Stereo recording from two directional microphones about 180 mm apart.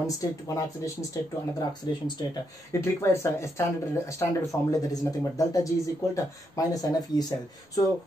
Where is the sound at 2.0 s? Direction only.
20° left (ahead or behind).